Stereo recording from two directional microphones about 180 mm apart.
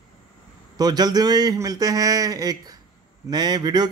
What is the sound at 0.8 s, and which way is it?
Speech, 20° right (ahead or behind).